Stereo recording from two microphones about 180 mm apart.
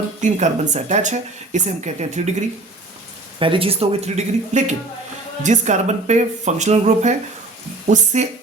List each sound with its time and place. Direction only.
0.2 s speech: 40° right (ahead or behind)
3.3 s speech: 30° right (ahead or behind)